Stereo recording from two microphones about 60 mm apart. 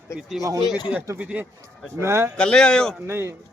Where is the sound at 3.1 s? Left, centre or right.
Right.